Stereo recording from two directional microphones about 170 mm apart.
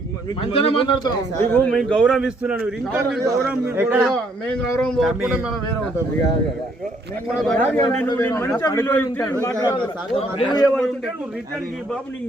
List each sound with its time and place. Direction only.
0.5 s a man's voice: 30° left (ahead or behind)
1.4 s a man's voice: 10° left (ahead or behind); by 4.1 s 10° right (ahead or behind)
4.1 s speech: 5° left (ahead or behind)
7.3 s speech: 5° left (ahead or behind)
8.0 s a man's voice: 20° left (ahead or behind)
9.6 s a man's voice: 30° left (ahead or behind)